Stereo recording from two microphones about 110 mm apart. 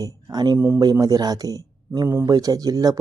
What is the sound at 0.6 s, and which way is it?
Speech, 20° right (ahead or behind).